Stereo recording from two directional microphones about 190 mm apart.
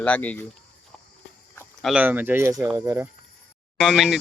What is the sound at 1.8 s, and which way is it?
Speech, 5° right (ahead or behind).